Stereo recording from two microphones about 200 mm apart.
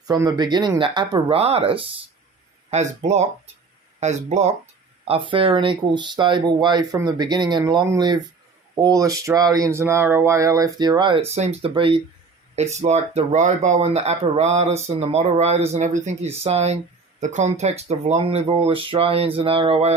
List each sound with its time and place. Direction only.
0.1 s speech: 20° right (ahead or behind)
11.3 s speech: 30° right (ahead or behind)